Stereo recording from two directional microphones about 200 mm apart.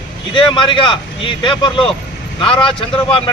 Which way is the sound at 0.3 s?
25° left (ahead or behind).